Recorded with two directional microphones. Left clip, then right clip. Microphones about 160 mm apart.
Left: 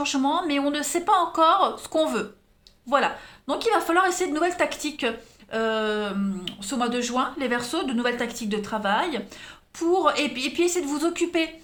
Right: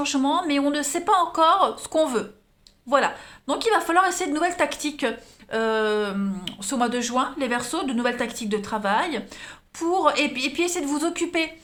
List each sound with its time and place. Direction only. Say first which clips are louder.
0.0 s a woman's voice: right 1 dB; 20° right (ahead or behind)